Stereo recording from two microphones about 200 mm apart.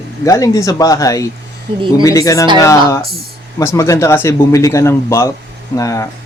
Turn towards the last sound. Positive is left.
turn(degrees=15)  # may be behind; listen again after turning